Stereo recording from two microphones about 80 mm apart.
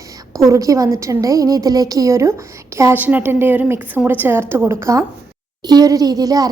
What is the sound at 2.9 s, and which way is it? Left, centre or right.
A woman's voice, right.